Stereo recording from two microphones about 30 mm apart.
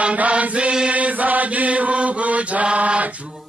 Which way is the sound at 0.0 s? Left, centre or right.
Right.